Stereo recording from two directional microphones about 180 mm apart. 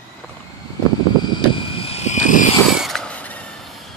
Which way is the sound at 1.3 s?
30° left (ahead or behind).